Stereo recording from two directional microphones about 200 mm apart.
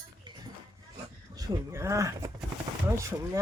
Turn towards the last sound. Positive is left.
turn(degrees=-15)  # may be behind; listen again after turning